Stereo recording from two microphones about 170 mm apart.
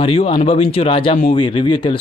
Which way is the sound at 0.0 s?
30° left (ahead or behind).